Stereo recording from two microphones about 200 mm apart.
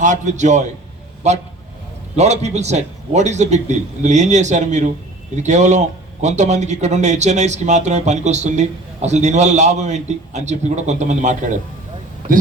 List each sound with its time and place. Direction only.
0.0 s speech: 35° right (ahead or behind)